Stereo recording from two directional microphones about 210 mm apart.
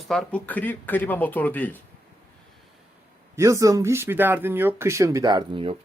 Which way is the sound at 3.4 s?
15° right (ahead or behind).